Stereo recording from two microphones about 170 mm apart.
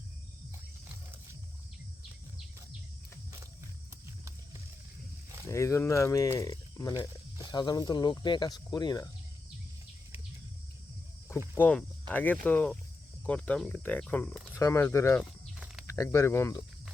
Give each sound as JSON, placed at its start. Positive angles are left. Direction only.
{"t": 5.5, "sound": "speech", "side_deg": 15}
{"t": 11.5, "sound": "speech", "side_deg": 10}
{"t": 15.5, "sound": "snake", "side_deg": -5}
{"t": 15.9, "sound": "speech", "side_deg": 20}